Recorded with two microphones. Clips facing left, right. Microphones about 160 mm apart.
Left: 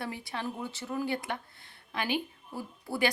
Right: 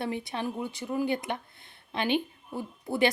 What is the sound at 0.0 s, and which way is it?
Speech, 20° right (ahead or behind).